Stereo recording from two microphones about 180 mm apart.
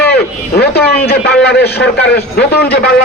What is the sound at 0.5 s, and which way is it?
A man's voice, 65° left (ahead or behind).